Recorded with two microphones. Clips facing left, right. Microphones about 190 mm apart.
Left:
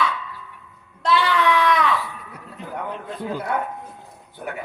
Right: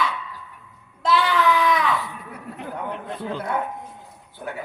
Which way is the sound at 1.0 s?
Centre (ahead or behind).